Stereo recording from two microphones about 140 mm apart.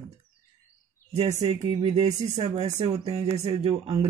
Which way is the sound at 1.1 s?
55° right (ahead or behind).